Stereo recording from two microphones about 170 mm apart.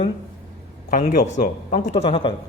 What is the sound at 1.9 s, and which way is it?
Speech, 35° left (ahead or behind).